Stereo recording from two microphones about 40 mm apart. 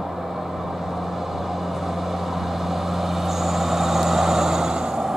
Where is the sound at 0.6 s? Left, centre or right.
Centre.